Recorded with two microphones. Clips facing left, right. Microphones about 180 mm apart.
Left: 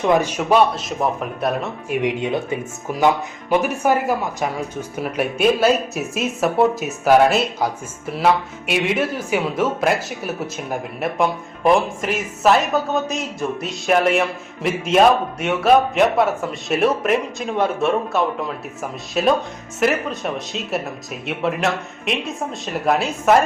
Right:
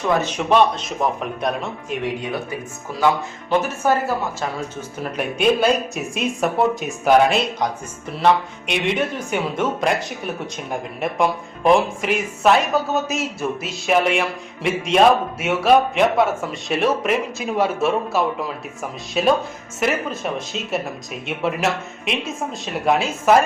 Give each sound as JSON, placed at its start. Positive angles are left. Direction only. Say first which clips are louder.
{"t": 0.1, "sound": "speech", "louder": "left 1 dB", "side_deg": 10}
{"t": 2.0, "sound": "speech", "louder": "left 5 dB", "side_deg": 20}